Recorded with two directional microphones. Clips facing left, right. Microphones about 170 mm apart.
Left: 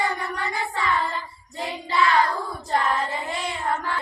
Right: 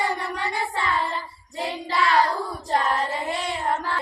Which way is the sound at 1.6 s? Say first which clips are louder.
Left 1 dB; 30° right (ahead or behind).